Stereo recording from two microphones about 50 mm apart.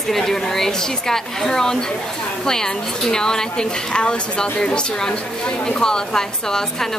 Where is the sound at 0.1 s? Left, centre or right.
Centre.